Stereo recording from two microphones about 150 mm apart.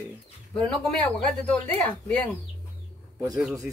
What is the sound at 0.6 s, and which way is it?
Speech, 5° left (ahead or behind).